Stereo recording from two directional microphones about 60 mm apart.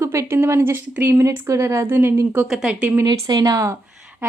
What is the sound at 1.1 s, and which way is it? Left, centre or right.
Speech, right.